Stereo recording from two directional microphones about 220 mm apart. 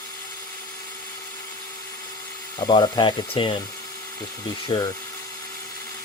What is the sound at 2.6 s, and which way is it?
Speech, 20° left (ahead or behind).